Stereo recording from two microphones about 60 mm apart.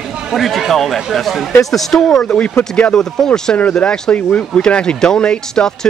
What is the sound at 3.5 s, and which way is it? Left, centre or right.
Speech, left.